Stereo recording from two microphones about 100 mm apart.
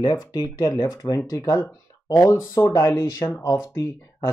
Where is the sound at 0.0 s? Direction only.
40° left (ahead or behind).